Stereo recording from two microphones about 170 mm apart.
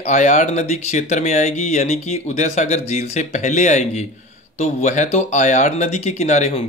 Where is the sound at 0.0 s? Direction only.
45° left (ahead or behind).